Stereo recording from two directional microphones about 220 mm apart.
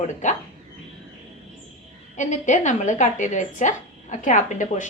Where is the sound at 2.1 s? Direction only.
35° left (ahead or behind).